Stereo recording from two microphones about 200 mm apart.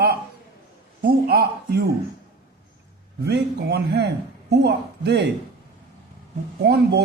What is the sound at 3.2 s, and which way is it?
Speech, 55° right (ahead or behind).